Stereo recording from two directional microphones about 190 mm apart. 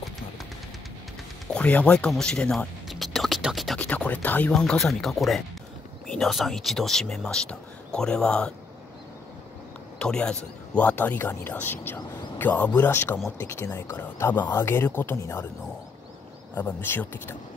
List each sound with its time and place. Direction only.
1.5 s speech: 5° left (ahead or behind)
9.9 s speech: 5° left (ahead or behind)
16.5 s speech: 10° left (ahead or behind)